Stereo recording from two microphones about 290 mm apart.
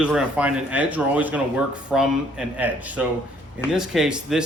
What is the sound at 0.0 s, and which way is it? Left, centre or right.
Speech, centre.